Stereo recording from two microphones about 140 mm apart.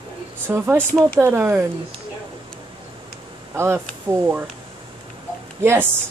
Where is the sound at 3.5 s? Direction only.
15° right (ahead or behind).